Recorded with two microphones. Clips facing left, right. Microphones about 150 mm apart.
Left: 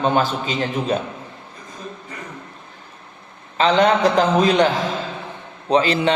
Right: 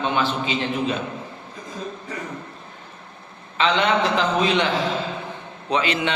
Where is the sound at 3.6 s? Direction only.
40° left (ahead or behind).